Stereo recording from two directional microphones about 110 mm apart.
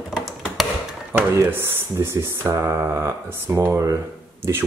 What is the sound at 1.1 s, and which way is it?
Speech, 20° right (ahead or behind).